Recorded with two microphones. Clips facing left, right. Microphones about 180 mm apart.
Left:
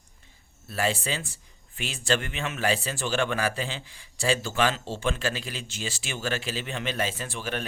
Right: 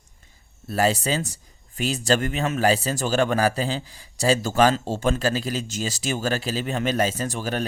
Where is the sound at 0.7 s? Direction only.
40° right (ahead or behind).